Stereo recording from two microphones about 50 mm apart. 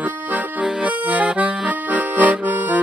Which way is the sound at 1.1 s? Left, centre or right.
Right.